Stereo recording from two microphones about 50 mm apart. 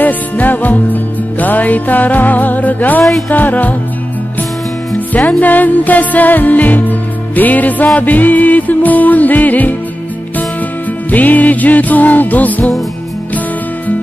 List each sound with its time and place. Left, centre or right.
0.0 s music: left
3.0 s music: centre
3.3 s music: left
5.4 s music: left
11.1 s music: left